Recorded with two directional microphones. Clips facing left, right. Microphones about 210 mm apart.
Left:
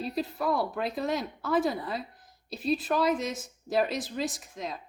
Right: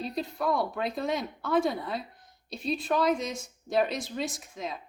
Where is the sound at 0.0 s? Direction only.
5° left (ahead or behind).